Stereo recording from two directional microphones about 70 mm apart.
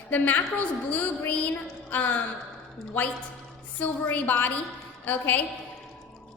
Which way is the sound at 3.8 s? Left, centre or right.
Left.